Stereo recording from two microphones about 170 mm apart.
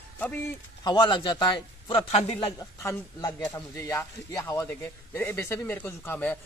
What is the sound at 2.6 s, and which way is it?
Speech, 20° left (ahead or behind).